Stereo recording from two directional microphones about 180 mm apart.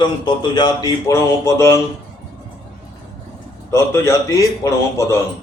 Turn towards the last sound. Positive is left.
turn(degrees=15)  # may be behind; listen again after turning